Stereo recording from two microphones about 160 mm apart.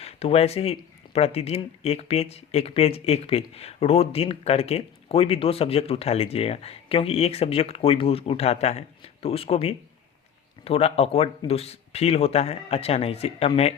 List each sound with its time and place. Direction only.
0.0 s speech: 40° left (ahead or behind)